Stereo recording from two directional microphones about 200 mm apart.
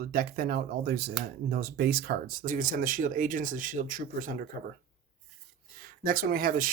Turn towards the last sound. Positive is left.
turn(degrees=-45)  # may be behind; listen again after turning